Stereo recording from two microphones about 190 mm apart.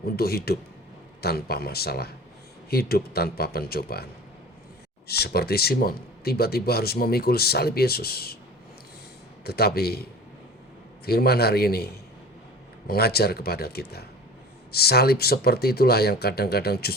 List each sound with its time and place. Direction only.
0.0 s speech: 55° left (ahead or behind)
5.0 s speech: 55° left (ahead or behind)
9.4 s speech: 55° left (ahead or behind)
12.9 s speech: 55° left (ahead or behind)